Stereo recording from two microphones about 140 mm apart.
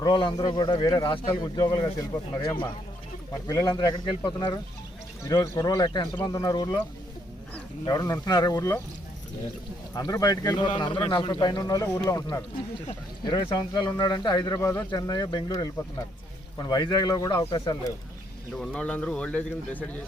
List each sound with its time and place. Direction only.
0.0 s a man's voice: 35° left (ahead or behind)
7.9 s speech: 25° left (ahead or behind)
9.9 s speech: 25° left (ahead or behind)
18.5 s speech: 5° left (ahead or behind)